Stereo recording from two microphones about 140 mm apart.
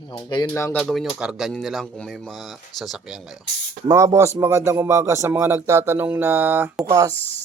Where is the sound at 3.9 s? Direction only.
25° right (ahead or behind).